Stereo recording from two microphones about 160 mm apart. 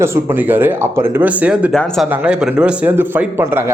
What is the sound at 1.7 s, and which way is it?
Speech, 5° left (ahead or behind).